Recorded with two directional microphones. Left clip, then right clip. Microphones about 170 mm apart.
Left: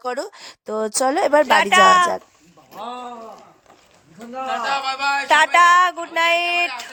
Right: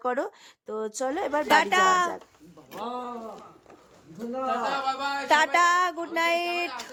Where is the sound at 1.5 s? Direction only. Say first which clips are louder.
Left 5 dB; 15° left (ahead or behind).